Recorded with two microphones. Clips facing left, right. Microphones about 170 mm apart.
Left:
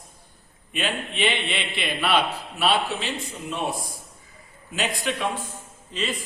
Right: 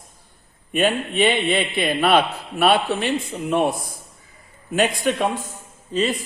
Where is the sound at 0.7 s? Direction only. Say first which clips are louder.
Right 8 dB; 45° right (ahead or behind).